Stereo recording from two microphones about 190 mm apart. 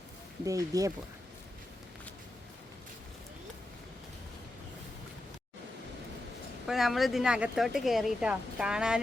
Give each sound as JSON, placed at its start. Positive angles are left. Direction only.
{"t": 0.4, "sound": "speech", "side_deg": -20}
{"t": 6.7, "sound": "speech", "side_deg": 0}